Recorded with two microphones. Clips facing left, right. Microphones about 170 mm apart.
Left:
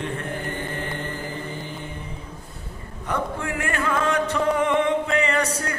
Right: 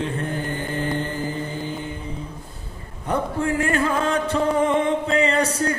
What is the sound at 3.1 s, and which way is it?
Music, 30° right (ahead or behind).